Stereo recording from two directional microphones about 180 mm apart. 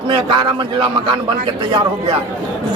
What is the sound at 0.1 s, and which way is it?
A man's voice, 25° right (ahead or behind).